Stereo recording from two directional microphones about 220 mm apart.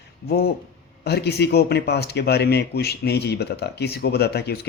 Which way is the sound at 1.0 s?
50° left (ahead or behind).